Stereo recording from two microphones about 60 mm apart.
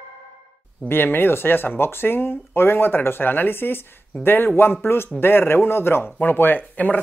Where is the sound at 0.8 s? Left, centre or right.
Left.